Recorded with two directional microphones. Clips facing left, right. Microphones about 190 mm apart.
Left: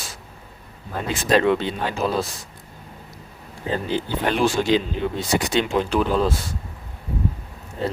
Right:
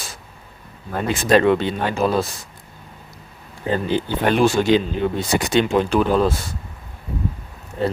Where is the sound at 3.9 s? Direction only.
55° right (ahead or behind).